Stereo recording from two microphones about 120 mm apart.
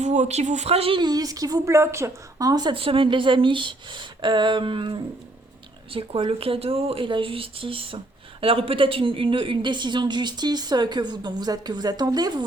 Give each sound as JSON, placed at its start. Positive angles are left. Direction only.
{"t": 0.0, "sound": "speech", "side_deg": -75}
{"t": 0.9, "sound": "a woman's voice", "side_deg": -35}
{"t": 2.7, "sound": "speech", "side_deg": -50}